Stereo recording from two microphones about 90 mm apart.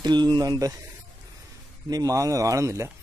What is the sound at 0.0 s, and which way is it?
Speech, 55° right (ahead or behind).